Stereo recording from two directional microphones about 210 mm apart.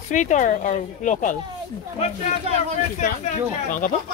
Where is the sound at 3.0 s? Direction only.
40° left (ahead or behind).